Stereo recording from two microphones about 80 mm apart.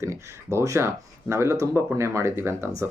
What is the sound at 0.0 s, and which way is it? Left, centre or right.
Speech, right.